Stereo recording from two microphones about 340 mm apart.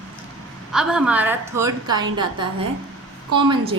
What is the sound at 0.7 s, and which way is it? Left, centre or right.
A woman's voice, centre.